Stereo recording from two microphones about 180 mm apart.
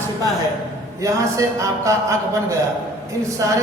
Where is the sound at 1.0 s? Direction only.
15° right (ahead or behind).